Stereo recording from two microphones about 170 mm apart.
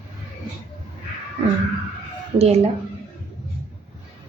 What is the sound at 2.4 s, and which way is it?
Speech, 35° right (ahead or behind).